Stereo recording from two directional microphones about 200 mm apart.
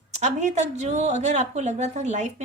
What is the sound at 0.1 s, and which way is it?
A woman's voice, 35° right (ahead or behind).